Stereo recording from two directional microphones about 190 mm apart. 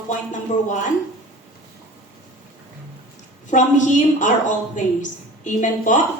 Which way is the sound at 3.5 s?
40° left (ahead or behind).